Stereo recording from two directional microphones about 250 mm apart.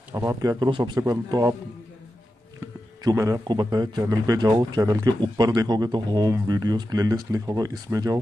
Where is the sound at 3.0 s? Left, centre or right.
Centre.